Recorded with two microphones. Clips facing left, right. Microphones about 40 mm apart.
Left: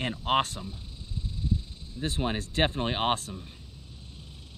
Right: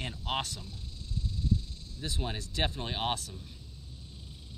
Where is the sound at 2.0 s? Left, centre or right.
Left.